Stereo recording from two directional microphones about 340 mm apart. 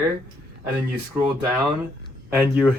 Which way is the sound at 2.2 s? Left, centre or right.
Centre.